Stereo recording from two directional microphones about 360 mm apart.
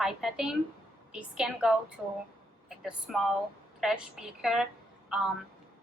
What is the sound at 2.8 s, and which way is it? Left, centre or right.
A woman's voice, centre.